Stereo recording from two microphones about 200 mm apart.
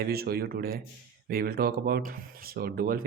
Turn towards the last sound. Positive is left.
turn(degrees=-50)  # may be behind; listen again after turning